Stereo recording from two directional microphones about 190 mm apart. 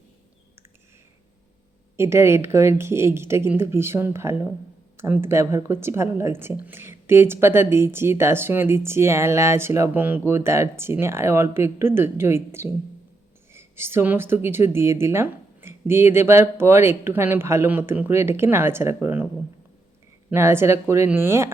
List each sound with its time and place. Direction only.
2.0 s speech: 15° right (ahead or behind)
20.3 s speech: 15° right (ahead or behind)